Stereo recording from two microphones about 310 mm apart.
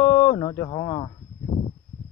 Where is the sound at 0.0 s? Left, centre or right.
Centre.